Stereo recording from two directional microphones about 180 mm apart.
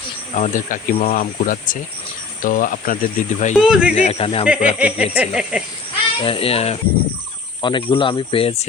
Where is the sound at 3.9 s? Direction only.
35° left (ahead or behind).